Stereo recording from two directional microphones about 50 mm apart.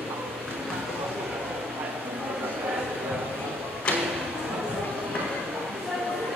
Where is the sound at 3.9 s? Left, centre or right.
Left.